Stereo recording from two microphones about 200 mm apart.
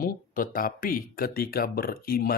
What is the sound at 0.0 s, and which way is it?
Speech, 45° left (ahead or behind).